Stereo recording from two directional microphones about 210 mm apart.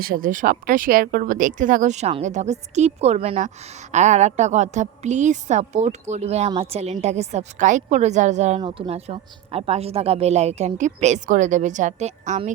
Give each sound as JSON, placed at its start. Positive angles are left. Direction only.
{"t": 0.0, "sound": "speech", "side_deg": -40}